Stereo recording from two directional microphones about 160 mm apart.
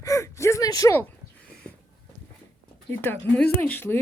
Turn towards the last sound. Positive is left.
turn(degrees=10)  # may be behind; listen again after turning